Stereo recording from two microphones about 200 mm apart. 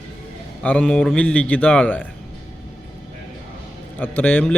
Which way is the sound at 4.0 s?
5° left (ahead or behind).